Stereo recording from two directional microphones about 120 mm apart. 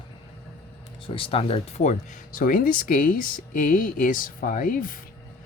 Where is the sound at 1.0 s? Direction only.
50° left (ahead or behind); by 4.8 s 90° left.